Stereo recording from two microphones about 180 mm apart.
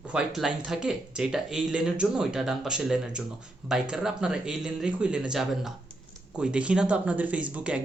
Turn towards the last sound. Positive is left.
turn(degrees=-5)  # may be behind; listen again after turning